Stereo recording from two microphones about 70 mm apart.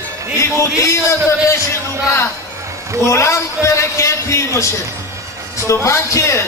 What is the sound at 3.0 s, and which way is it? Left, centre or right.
A man's voice, left.